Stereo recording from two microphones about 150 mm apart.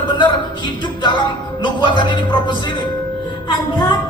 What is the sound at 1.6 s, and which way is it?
Music, 30° left (ahead or behind).